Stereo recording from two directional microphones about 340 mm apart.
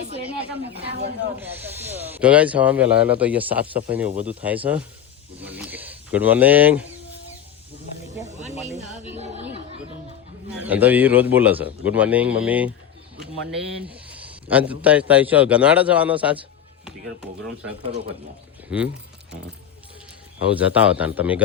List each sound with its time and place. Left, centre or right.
0.4 s speech: right
1.4 s speech: centre
9.1 s chatter: centre
10.7 s speech: centre
13.9 s a sound: centre
14.5 s speech: centre
18.7 s speech: centre
20.6 s speech: centre